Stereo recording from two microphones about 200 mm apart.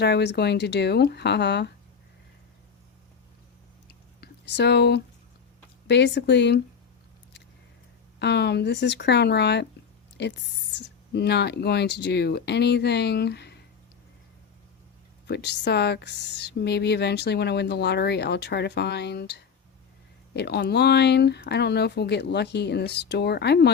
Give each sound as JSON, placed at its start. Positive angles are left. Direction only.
{"t": 0.0, "sound": "speech", "side_deg": 55}
{"t": 4.2, "sound": "speech", "side_deg": 55}
{"t": 8.2, "sound": "speech", "side_deg": 55}
{"t": 15.3, "sound": "speech", "side_deg": 55}